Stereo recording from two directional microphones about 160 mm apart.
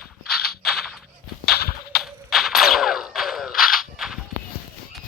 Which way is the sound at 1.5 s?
80° left.